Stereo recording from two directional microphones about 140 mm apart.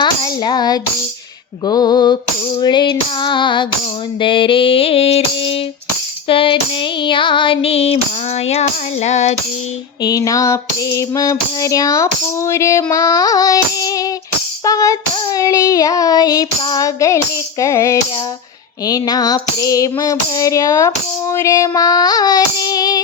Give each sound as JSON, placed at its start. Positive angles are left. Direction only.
{"t": 0.0, "sound": "a sound", "side_deg": 30}
{"t": 1.6, "sound": "mantra", "side_deg": 30}
{"t": 8.4, "sound": "child singing", "side_deg": 50}
{"t": 10.0, "sound": "female singing", "side_deg": 25}